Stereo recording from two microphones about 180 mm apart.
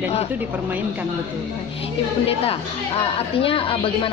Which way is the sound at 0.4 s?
10° right (ahead or behind).